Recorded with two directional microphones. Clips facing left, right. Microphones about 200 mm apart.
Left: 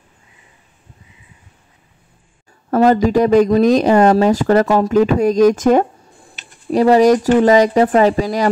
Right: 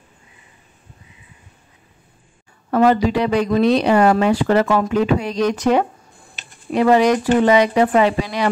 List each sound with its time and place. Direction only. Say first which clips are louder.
2.7 s speech: left 3 dB; 40° left (ahead or behind)